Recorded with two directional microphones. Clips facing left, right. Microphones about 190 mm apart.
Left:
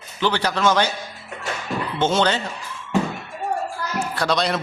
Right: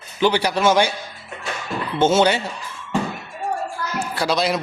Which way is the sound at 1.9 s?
10° right (ahead or behind).